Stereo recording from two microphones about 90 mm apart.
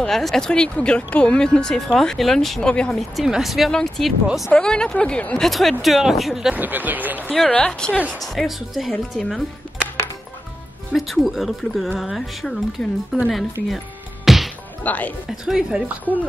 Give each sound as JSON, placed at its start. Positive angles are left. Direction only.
{"t": 0.0, "sound": "speech", "side_deg": 5}
{"t": 3.0, "sound": "speech", "side_deg": -5}
{"t": 6.5, "sound": "speech", "side_deg": -20}
{"t": 7.3, "sound": "speech", "side_deg": 10}
{"t": 11.0, "sound": "speech", "side_deg": 0}
{"t": 14.2, "sound": "music", "side_deg": 0}
{"t": 14.8, "sound": "speech", "side_deg": 15}
{"t": 15.2, "sound": "speech", "side_deg": -5}